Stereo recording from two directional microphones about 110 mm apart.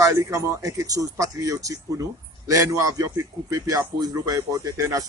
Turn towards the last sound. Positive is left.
turn(degrees=-30)  # may be behind; listen again after turning